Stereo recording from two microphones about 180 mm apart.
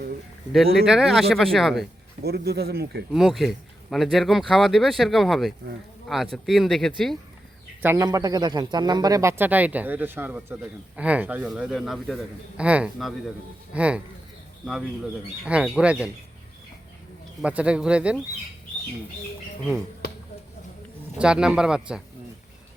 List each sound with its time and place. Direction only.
0.5 s speech: centre (ahead or behind)
2.2 s speech: 60° right (ahead or behind)
3.1 s speech: centre (ahead or behind)
7.8 s speech: 15° right (ahead or behind)
15.4 s speech: 5° right (ahead or behind)
17.4 s speech: 5° right (ahead or behind)
21.2 s speech: 5° right (ahead or behind)